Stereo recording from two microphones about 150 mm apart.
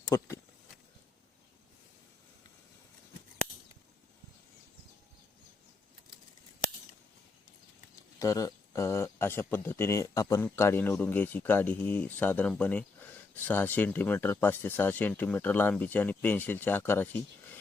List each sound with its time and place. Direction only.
0.1 s speech: 20° left (ahead or behind)
8.2 s speech: 20° left (ahead or behind)